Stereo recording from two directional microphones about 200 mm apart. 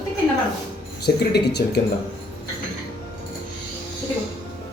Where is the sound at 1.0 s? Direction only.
55° left (ahead or behind).